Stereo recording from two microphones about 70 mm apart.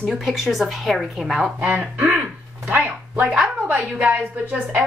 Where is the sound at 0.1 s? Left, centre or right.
Centre.